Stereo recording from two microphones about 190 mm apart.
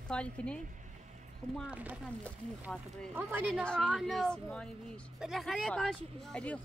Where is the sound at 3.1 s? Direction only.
10° right (ahead or behind).